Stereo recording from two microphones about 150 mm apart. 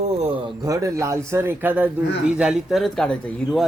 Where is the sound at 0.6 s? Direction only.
20° right (ahead or behind).